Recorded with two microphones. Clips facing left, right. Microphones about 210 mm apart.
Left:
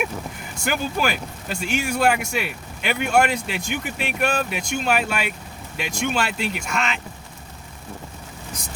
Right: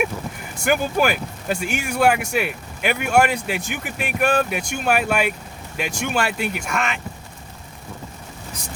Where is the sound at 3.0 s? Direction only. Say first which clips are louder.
Right 1 dB; 5° right (ahead or behind).